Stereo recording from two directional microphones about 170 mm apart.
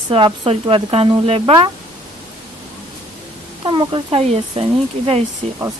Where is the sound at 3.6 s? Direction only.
30° right (ahead or behind).